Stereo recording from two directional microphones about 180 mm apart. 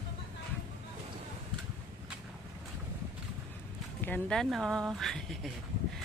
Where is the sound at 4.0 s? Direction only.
5° left (ahead or behind).